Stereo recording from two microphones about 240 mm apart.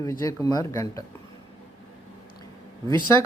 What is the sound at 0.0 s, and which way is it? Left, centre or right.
Speech, centre.